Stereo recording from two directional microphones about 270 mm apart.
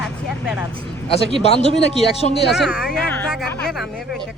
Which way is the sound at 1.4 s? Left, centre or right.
Left.